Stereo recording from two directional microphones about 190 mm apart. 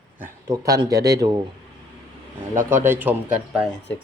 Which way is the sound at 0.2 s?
15° right (ahead or behind).